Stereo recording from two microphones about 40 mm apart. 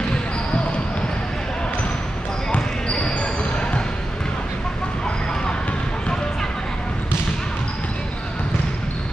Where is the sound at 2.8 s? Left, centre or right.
Left.